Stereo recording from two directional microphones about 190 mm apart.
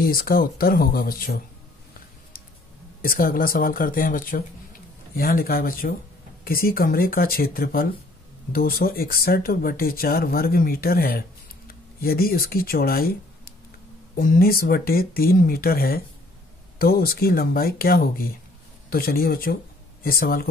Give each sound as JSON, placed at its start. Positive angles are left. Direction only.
{"t": 0.0, "sound": "speech", "side_deg": 50}
{"t": 3.0, "sound": "speech", "side_deg": 50}
{"t": 14.1, "sound": "speech", "side_deg": 50}